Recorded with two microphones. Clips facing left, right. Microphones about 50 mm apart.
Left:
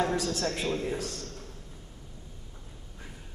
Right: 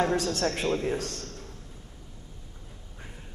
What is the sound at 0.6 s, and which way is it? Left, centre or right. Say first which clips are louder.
Speech: right 3 dB; right.